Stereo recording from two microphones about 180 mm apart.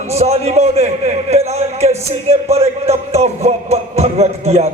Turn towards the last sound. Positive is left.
turn(degrees=-35)  # may be behind; listen again after turning